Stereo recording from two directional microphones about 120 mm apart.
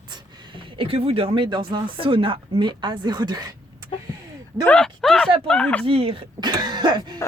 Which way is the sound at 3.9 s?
45° left (ahead or behind).